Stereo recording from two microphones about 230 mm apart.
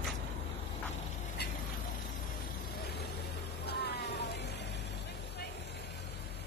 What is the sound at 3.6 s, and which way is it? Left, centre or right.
Cat, left.